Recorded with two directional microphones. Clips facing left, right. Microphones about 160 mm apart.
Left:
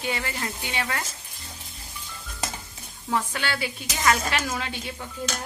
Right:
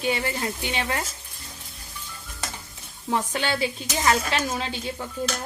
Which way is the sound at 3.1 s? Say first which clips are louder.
Right 2 dB; 25° right (ahead or behind).